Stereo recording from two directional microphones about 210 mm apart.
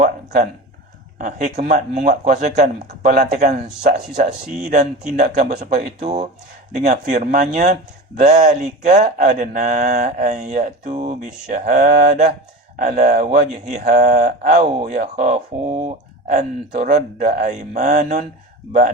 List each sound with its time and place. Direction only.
0.0 s a sound: 40° right (ahead or behind)
1.2 s speech: 35° right (ahead or behind)
13.3 s speech: 50° right (ahead or behind)
13.9 s speech: 35° right (ahead or behind)